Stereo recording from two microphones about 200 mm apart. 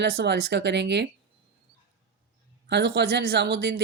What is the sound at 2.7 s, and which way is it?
Speech, 55° right (ahead or behind).